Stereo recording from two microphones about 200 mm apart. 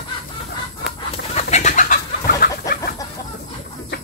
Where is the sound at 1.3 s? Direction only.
35° left (ahead or behind).